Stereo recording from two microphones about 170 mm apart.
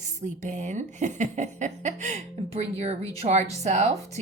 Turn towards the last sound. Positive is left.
turn(degrees=-40)  # may be behind; listen again after turning